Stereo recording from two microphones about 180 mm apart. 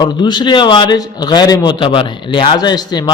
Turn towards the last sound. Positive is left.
turn(degrees=20)  # may be behind; listen again after turning